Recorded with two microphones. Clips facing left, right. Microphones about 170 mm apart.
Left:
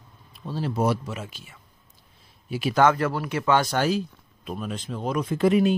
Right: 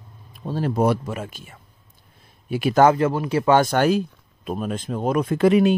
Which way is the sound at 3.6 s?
55° right (ahead or behind).